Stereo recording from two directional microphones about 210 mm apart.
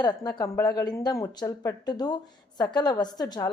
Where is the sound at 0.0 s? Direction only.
20° left (ahead or behind).